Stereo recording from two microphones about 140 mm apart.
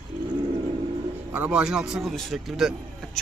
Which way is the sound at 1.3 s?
10° right (ahead or behind).